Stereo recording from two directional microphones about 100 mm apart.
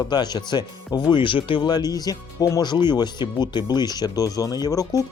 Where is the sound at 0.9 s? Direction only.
35° left (ahead or behind).